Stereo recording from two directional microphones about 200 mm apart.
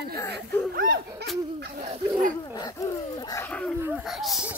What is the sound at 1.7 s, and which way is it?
Speech, 35° right (ahead or behind).